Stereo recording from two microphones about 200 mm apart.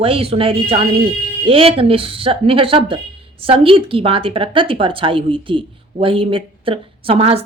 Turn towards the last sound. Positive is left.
turn(degrees=-30)  # may be behind; listen again after turning